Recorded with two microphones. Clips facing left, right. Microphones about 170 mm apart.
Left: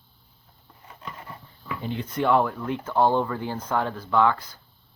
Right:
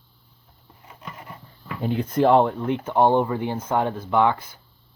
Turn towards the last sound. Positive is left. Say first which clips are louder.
# right 1 dB
turn(degrees=-20)  # may be behind; listen again after turning